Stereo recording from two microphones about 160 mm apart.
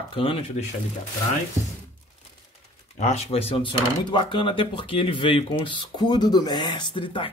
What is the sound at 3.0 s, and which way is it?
Speech, 45° left (ahead or behind).